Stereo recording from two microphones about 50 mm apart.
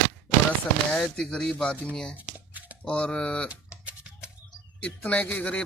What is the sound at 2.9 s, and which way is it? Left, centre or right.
Speech, left.